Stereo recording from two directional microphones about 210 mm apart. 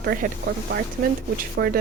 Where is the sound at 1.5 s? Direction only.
50° right (ahead or behind).